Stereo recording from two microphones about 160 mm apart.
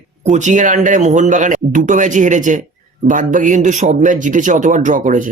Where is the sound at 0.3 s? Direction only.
50° right (ahead or behind).